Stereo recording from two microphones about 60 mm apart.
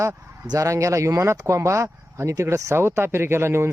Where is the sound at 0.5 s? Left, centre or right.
Right.